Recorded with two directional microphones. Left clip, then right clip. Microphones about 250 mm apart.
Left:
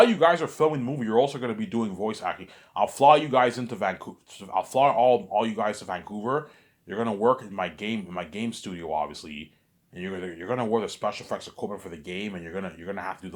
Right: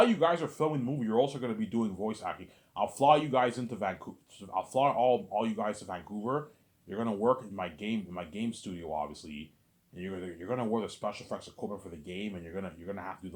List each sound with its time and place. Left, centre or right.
0.0 s speech: left